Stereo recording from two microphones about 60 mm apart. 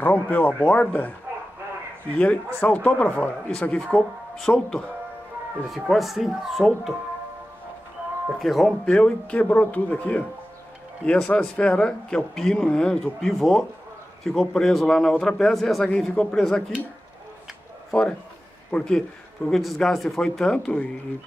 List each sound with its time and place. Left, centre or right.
0.0 s speech: left
2.1 s speech: left
3.8 s speech: centre
5.7 s speech: centre
8.3 s speech: centre
8.8 s speech: centre
13.3 s speech: centre
18.7 s speech: centre
19.5 s speech: centre